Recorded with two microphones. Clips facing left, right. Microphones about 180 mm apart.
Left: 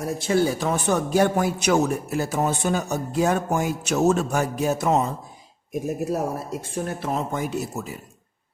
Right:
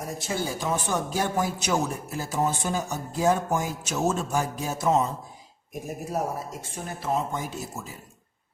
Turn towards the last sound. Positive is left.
turn(degrees=65)  # may be behind; listen again after turning